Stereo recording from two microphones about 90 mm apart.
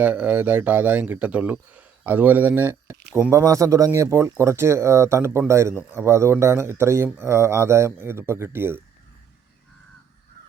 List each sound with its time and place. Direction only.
0.0 s speech: 15° right (ahead or behind)
3.4 s speech: 35° right (ahead or behind)